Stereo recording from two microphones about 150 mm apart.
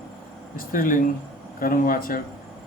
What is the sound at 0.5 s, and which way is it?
Speech, 70° left (ahead or behind).